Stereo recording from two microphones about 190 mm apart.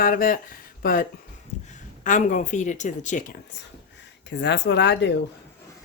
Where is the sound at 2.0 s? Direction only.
40° left (ahead or behind).